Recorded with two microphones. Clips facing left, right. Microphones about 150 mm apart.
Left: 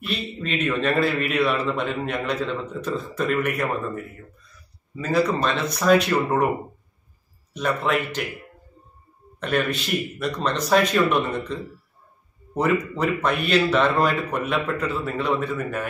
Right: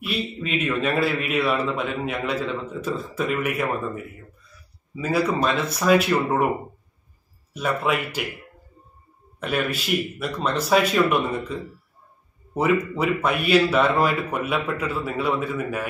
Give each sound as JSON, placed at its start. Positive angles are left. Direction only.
{"t": 0.0, "sound": "a man's voice", "side_deg": -5}
{"t": 7.5, "sound": "speech", "side_deg": -5}
{"t": 9.4, "sound": "speech", "side_deg": -5}